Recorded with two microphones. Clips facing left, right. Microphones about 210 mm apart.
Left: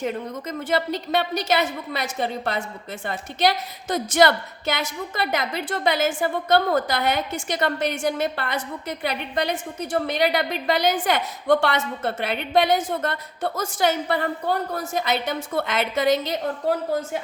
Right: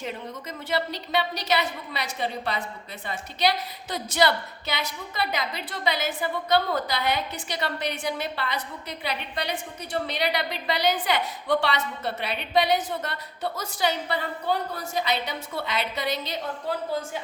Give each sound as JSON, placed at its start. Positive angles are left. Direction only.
{"t": 0.7, "sound": "a woman's voice", "side_deg": 50}
{"t": 3.8, "sound": "a woman's voice", "side_deg": 50}